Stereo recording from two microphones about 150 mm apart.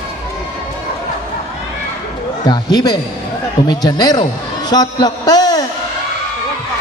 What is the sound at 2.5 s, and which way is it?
A man's voice, 25° left (ahead or behind).